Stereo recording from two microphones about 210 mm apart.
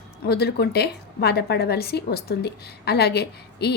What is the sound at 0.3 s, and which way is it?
A woman's voice, 50° left (ahead or behind).